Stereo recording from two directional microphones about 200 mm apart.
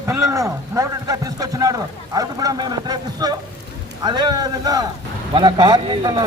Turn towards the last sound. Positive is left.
turn(degrees=-20)  # may be behind; listen again after turning